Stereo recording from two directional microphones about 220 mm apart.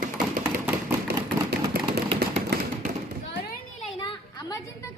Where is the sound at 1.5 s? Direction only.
45° right (ahead or behind).